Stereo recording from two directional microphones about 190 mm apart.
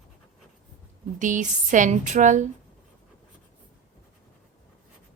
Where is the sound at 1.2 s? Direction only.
40° right (ahead or behind).